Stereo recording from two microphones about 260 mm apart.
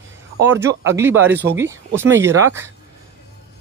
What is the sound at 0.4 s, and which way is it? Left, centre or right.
Speech, centre.